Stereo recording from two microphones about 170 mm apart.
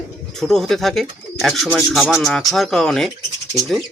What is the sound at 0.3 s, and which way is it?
Speech, centre (ahead or behind).